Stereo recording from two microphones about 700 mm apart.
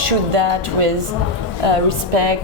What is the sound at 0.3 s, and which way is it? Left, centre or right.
Speech, right.